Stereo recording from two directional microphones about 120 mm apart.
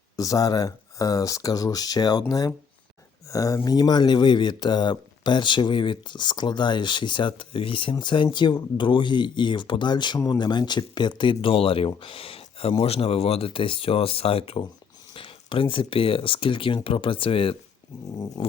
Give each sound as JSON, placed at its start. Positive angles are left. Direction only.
{"t": 0.2, "sound": "speech", "side_deg": 30}
{"t": 3.2, "sound": "speech", "side_deg": 30}
{"t": 17.9, "sound": "speech", "side_deg": 30}